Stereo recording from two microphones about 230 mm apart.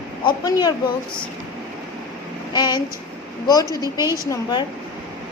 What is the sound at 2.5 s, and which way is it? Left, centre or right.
A woman's voice, centre.